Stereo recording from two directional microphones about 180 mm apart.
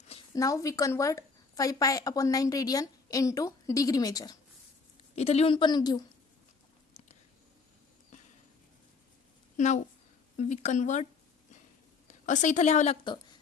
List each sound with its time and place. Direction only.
0.3 s a woman's voice: 20° left (ahead or behind)
5.1 s a woman's voice: 35° left (ahead or behind)
9.6 s a woman's voice: 40° left (ahead or behind)
12.0 s a woman's voice: 45° left (ahead or behind)